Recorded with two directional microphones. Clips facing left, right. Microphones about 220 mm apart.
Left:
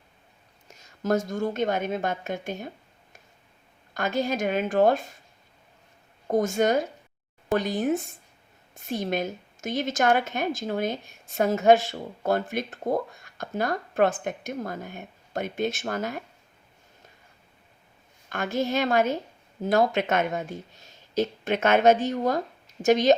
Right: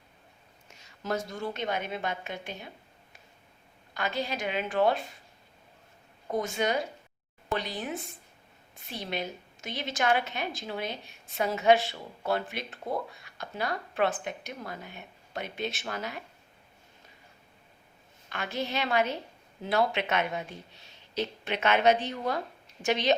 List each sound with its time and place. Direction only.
0.7 s a woman's voice: 45° left (ahead or behind)
6.2 s a woman's voice: 45° left (ahead or behind)
18.3 s a woman's voice: 45° left (ahead or behind)